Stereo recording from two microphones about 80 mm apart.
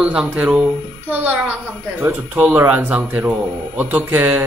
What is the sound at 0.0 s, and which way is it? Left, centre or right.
Speech, centre.